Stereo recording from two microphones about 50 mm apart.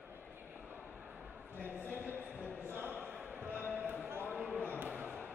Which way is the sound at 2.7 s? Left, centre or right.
Right.